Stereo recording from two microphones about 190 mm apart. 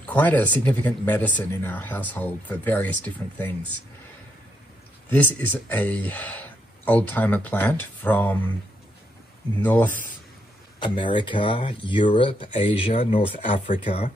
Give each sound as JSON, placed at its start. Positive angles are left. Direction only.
{"t": 0.0, "sound": "speech", "side_deg": 10}
{"t": 5.1, "sound": "speech", "side_deg": 10}
{"t": 9.6, "sound": "speech", "side_deg": 10}
{"t": 10.8, "sound": "speech", "side_deg": 25}